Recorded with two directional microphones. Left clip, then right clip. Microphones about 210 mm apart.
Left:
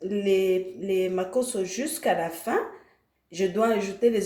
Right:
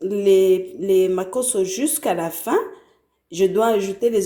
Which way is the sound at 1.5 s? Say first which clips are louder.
Right 8 dB; 40° right (ahead or behind).